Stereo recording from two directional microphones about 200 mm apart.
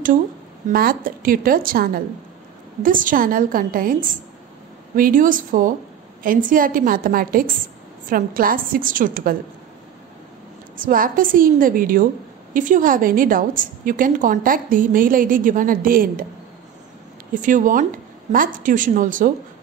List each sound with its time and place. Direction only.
0.7 s a woman's voice: 45° right (ahead or behind)
10.8 s a woman's voice: 45° right (ahead or behind)
17.3 s a woman's voice: 40° right (ahead or behind)